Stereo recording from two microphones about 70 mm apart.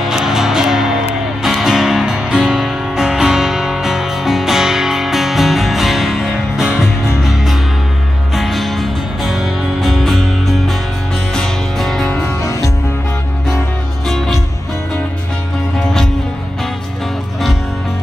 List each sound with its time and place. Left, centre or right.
0.0 s music: centre
11.3 s music: centre
12.3 s music: left
14.0 s music: centre
15.8 s music: centre